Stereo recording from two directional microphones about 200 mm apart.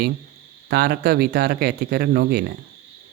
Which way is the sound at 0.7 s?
50° right (ahead or behind).